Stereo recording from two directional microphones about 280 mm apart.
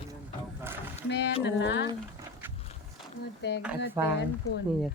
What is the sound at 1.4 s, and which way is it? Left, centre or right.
Speech, left.